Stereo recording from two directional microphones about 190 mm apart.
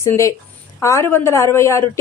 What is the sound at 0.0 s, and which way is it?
A woman's voice, 15° left (ahead or behind).